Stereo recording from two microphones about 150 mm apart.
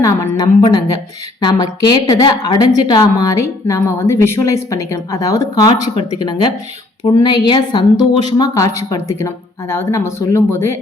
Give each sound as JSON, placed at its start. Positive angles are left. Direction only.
{"t": 0.0, "sound": "a woman's voice", "side_deg": 20}
{"t": 7.0, "sound": "a woman's voice", "side_deg": 30}